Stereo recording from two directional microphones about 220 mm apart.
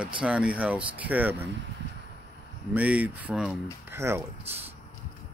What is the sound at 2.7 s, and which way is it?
Speech, 5° right (ahead or behind).